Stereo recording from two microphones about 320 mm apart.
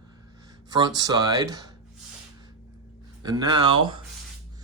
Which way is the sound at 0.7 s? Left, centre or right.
Centre.